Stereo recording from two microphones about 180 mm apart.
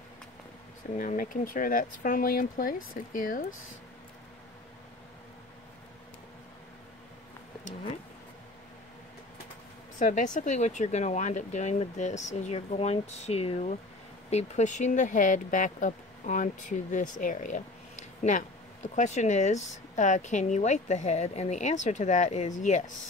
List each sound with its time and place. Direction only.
0.9 s speech: 50° left (ahead or behind)
9.9 s speech: 45° left (ahead or behind)